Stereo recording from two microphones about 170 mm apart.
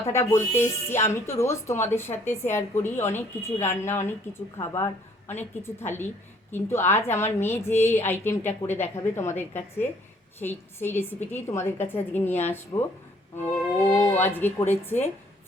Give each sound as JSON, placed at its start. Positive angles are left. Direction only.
{"t": 0.1, "sound": "speech", "side_deg": 15}
{"t": 14.3, "sound": "speech", "side_deg": 10}